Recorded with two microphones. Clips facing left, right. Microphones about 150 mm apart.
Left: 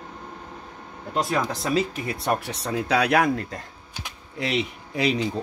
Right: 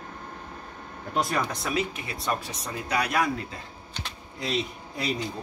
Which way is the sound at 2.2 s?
65° left (ahead or behind).